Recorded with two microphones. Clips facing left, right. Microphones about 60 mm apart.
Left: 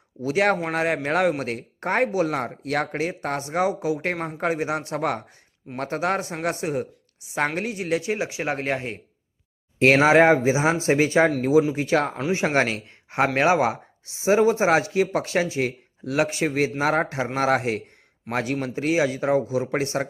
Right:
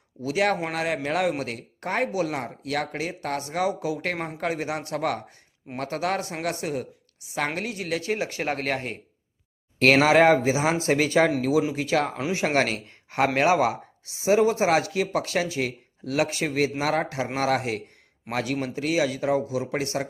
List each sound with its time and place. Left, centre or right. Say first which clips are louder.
0.2 s speech: left 3 dB; left